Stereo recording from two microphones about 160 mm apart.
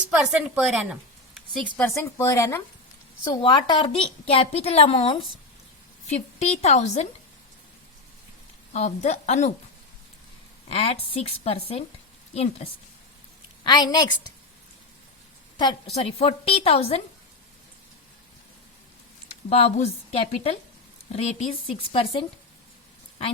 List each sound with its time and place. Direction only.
0.1 s a woman's voice: 5° right (ahead or behind)
1.5 s a woman's voice: 10° left (ahead or behind)
3.2 s a woman's voice: 30° left (ahead or behind); by 7.1 s 45° left (ahead or behind)
8.7 s a woman's voice: 45° left (ahead or behind)
10.7 s a woman's voice: 40° left (ahead or behind)
13.7 s a woman's voice: 25° left (ahead or behind)
16.0 s a woman's voice: 40° left (ahead or behind)
19.5 s a woman's voice: 40° left (ahead or behind)